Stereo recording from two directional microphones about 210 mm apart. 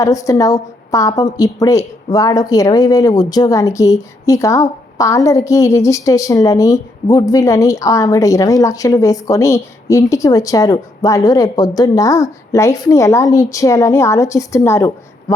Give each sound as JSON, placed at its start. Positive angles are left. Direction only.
{"t": 0.0, "sound": "a woman's voice", "side_deg": 15}